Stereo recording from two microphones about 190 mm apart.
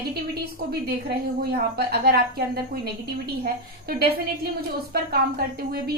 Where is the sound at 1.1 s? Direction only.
55° right (ahead or behind).